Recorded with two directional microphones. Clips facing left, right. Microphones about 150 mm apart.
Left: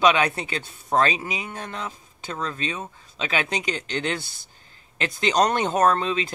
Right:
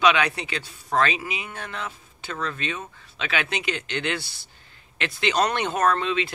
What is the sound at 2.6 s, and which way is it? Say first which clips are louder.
Speech: left 1 dB; 35° left (ahead or behind).